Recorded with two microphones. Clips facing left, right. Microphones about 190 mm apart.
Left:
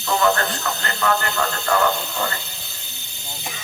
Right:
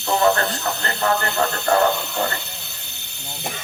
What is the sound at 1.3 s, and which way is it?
Speech, 60° right (ahead or behind).